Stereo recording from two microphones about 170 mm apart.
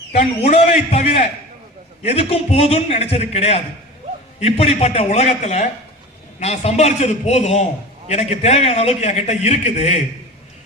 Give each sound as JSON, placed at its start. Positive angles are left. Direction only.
{"t": 0.1, "sound": "a man's voice", "side_deg": 40}